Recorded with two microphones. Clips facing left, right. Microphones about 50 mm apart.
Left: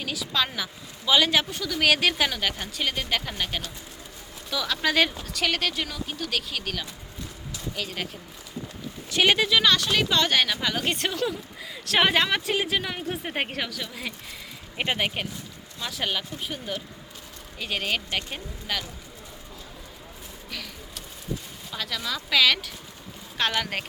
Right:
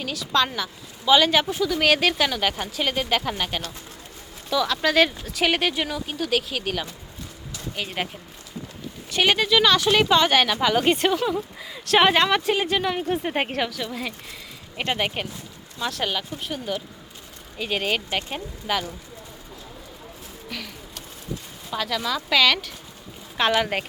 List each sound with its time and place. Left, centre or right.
0.0 s speech: centre
7.8 s speech: right
9.0 s speech: centre
14.8 s speech: centre
15.0 s speech: centre
20.5 s a sound: centre
21.7 s speech: centre
23.5 s speech: centre